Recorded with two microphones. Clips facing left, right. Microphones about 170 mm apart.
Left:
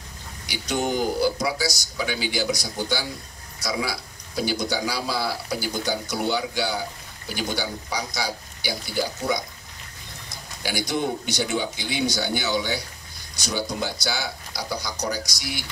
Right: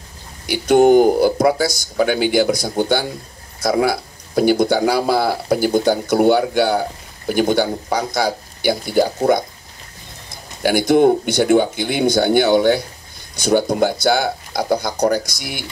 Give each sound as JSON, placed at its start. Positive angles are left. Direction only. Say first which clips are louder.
{"t": 0.5, "sound": "speech", "louder": "right 15 dB", "side_deg": -55}
{"t": 10.6, "sound": "speech", "louder": "right 13 dB", "side_deg": -55}